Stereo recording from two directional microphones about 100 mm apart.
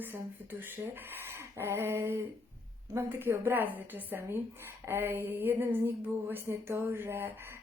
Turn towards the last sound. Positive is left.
turn(degrees=-25)  # may be behind; listen again after turning